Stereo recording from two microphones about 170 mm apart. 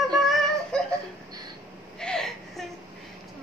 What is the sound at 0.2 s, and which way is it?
Synthetic singing, centre (ahead or behind).